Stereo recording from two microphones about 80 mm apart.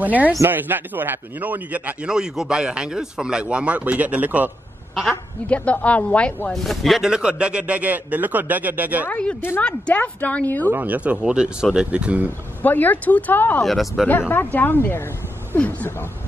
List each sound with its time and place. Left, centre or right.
0.0 s a man's voice: centre
5.5 s a woman's voice: centre
6.5 s a man's voice: centre; by 9.1 s right
9.1 s a woman's voice: centre
10.7 s a man's voice: right
12.6 s speech: left
13.6 s speech: centre
14.3 s speech: left